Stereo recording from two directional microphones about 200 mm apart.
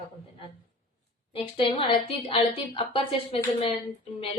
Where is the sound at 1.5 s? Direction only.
25° left (ahead or behind).